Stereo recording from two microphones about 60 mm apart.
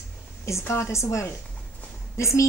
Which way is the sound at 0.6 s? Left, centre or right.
Left.